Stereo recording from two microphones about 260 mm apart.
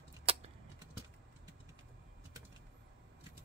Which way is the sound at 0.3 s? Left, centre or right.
Right.